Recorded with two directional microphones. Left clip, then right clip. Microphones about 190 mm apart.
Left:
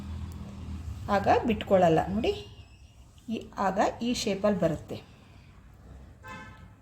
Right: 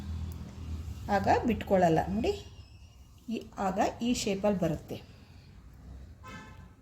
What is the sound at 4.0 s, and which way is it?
Speech, 50° left (ahead or behind).